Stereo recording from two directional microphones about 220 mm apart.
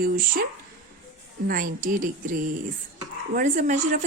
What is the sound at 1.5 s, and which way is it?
Speech, 40° right (ahead or behind).